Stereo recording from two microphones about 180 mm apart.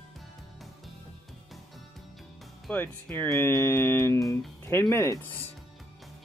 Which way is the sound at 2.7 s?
10° left (ahead or behind).